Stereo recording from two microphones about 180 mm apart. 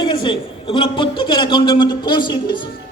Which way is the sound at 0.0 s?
25° left (ahead or behind).